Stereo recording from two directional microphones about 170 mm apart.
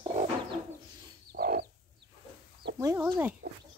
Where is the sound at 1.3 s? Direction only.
70° right (ahead or behind).